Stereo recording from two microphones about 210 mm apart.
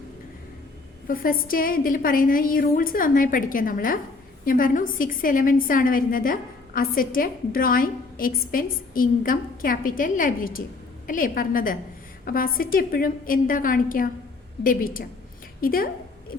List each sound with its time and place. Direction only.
1.0 s a woman's voice: 45° left (ahead or behind)